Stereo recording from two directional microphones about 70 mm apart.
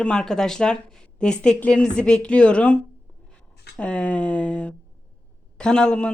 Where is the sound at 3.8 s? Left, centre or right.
Centre.